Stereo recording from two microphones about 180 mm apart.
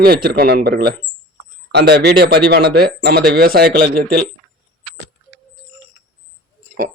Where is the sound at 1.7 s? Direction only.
70° right (ahead or behind).